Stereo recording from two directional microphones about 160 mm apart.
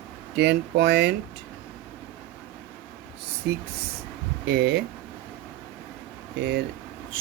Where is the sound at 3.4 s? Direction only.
90° right.